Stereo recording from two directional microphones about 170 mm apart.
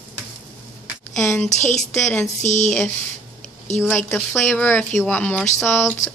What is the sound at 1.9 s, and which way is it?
Speech, 5° left (ahead or behind).